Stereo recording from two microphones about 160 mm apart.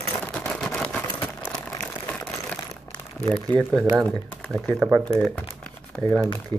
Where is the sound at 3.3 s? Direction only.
Centre (ahead or behind).